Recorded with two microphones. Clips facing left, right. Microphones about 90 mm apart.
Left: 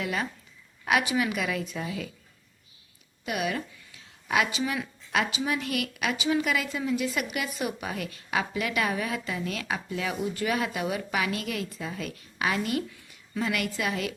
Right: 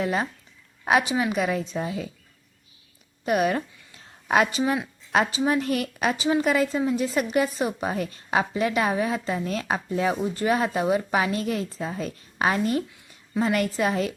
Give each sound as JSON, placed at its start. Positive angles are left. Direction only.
{"t": 0.0, "sound": "a woman's voice", "side_deg": -35}
{"t": 3.2, "sound": "a sound", "side_deg": -40}
{"t": 5.1, "sound": "a woman's voice", "side_deg": -35}